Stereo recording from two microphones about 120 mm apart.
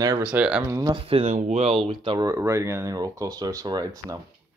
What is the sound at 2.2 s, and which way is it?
Speech, 25° right (ahead or behind).